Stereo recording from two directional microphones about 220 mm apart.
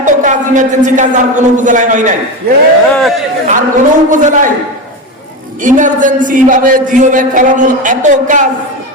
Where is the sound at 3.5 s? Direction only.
35° right (ahead or behind).